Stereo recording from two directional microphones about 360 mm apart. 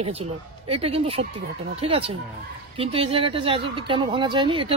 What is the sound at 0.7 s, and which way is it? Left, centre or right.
Speech, centre.